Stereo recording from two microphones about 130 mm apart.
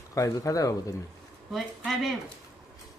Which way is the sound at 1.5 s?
Centre (ahead or behind).